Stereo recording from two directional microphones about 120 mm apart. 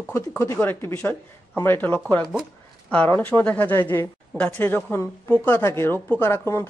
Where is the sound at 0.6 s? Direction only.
20° left (ahead or behind).